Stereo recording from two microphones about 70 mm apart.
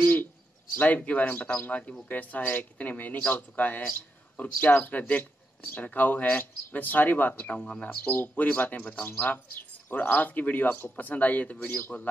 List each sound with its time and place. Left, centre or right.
0.0 s bird: left
0.7 s speech: left
7.5 s speech: centre
7.8 s speech: left